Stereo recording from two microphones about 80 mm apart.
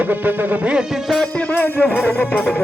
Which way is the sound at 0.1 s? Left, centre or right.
Right.